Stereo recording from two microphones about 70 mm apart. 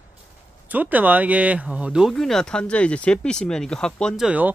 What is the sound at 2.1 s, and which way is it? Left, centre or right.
Speech, centre.